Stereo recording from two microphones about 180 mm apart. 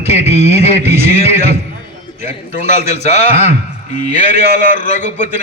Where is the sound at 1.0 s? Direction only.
35° left (ahead or behind).